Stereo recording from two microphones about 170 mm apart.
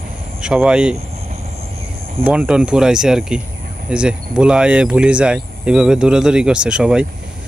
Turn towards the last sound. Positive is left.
turn(degrees=-5)  # may be behind; listen again after turning